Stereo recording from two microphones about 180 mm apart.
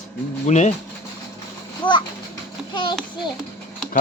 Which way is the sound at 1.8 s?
25° left (ahead or behind).